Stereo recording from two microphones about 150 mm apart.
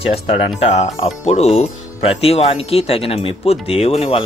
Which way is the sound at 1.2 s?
45° left (ahead or behind).